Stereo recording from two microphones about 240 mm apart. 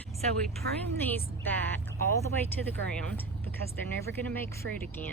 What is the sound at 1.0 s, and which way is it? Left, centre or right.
Speech, centre.